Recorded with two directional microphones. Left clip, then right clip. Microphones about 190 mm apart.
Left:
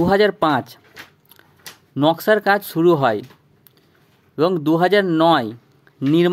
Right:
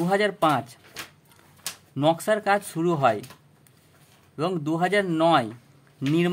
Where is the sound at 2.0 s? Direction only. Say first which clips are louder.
Left 6 dB; 30° left (ahead or behind).